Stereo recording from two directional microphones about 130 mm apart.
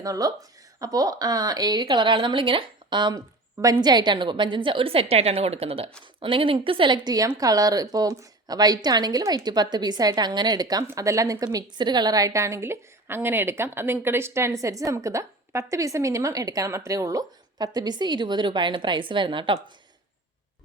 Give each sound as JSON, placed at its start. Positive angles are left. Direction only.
{"t": 0.0, "sound": "a woman's voice", "side_deg": -30}